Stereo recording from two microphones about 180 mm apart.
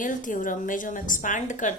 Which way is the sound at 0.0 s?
45° left (ahead or behind).